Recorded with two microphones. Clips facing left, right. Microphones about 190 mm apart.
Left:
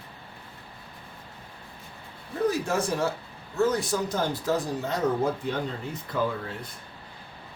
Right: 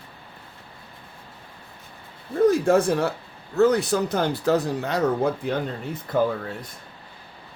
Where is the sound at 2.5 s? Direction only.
55° right (ahead or behind).